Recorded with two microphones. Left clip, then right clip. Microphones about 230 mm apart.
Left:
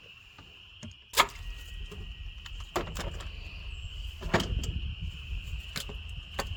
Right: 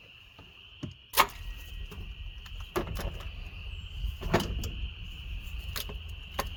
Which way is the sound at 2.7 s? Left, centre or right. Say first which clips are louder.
Even; left.